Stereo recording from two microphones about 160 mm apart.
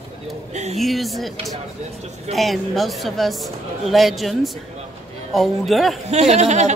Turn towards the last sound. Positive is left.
turn(degrees=-45)  # may be behind; listen again after turning